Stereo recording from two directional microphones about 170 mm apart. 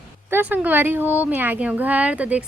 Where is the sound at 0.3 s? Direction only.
10° right (ahead or behind).